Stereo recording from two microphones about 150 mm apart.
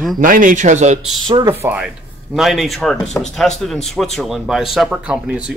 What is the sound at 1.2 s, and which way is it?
Speech, 25° right (ahead or behind).